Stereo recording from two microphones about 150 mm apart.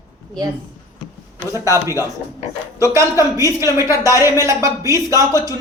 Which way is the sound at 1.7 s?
20° right (ahead or behind).